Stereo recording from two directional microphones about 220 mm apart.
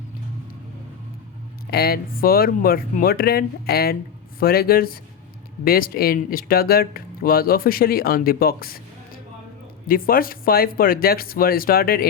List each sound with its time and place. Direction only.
1.7 s speech: 45° left (ahead or behind)
9.8 s speech: 40° left (ahead or behind)